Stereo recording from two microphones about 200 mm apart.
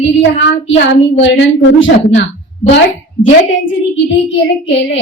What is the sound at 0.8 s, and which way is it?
Speech, 65° left (ahead or behind).